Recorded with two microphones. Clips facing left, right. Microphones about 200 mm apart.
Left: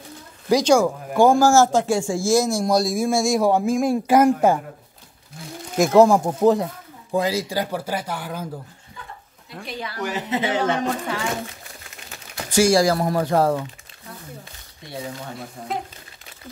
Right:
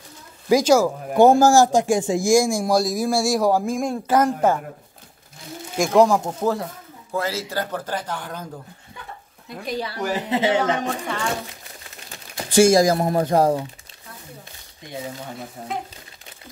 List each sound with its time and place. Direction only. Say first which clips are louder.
0.5 s speech: even; 5° right (ahead or behind)
1.1 s a man's voice: right 2 dB; 20° right (ahead or behind); by 4.6 s 10° left (ahead or behind)
5.8 s speech: left 2 dB; 10° left (ahead or behind)
9.7 s speech: right 3 dB; 35° right (ahead or behind)
12.4 s speech: right 2 dB; 25° right (ahead or behind)